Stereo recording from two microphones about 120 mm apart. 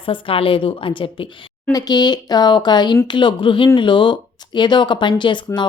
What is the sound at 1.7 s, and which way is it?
A woman's voice, 35° left (ahead or behind).